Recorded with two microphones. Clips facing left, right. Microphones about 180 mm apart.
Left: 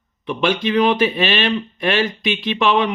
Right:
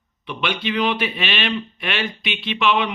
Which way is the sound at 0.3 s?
40° left (ahead or behind).